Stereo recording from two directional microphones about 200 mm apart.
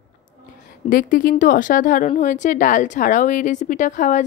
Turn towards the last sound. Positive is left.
turn(degrees=40)  # may be behind; listen again after turning